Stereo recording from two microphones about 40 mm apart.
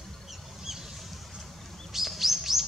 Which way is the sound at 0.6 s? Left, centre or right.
Centre.